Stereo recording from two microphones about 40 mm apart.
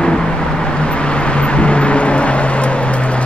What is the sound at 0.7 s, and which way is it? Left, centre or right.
Vehicle, left.